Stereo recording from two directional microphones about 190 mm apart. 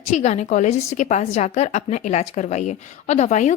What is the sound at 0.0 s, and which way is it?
A woman's voice, 35° left (ahead or behind).